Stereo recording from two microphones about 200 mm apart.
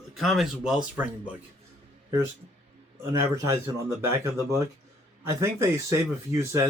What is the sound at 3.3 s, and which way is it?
Speech, 15° right (ahead or behind).